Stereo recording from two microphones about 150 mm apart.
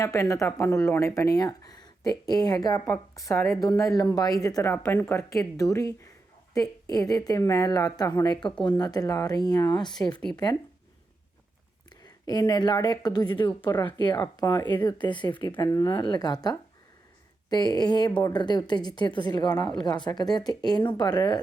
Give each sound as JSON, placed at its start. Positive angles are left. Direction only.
{"t": 0.0, "sound": "a woman's voice", "side_deg": 20}
{"t": 12.0, "sound": "a woman's voice", "side_deg": 25}